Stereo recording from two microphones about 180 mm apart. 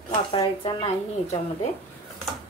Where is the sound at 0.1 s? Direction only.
30° left (ahead or behind).